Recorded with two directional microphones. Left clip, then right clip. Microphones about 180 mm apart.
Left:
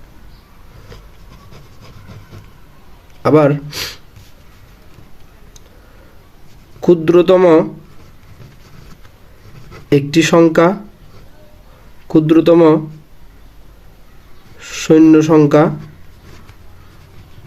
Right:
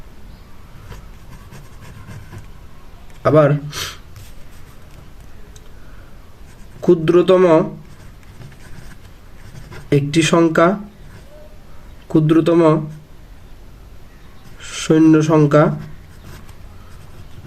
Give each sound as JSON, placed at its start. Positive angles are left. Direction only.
{"t": 3.2, "sound": "speech", "side_deg": 30}
{"t": 6.8, "sound": "speech", "side_deg": 25}
{"t": 9.9, "sound": "speech", "side_deg": 25}
{"t": 12.0, "sound": "speech", "side_deg": 25}
{"t": 14.6, "sound": "speech", "side_deg": 25}